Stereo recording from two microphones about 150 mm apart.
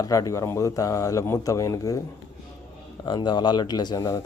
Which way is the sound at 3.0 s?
30° left (ahead or behind).